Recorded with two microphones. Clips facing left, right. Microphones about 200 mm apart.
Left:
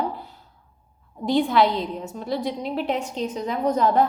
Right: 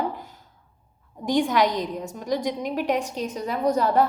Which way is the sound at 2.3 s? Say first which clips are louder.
Right 1 dB; 15° right (ahead or behind).